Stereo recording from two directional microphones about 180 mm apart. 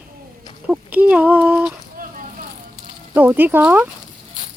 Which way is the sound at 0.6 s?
10° right (ahead or behind).